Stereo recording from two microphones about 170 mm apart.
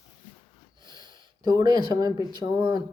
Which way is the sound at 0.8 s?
25° right (ahead or behind).